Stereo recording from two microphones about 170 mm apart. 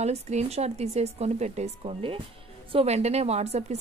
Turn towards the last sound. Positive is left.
turn(degrees=-40)  # may be behind; listen again after turning